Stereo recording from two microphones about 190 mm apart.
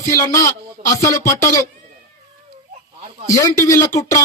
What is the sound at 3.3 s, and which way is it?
Speech, 15° left (ahead or behind).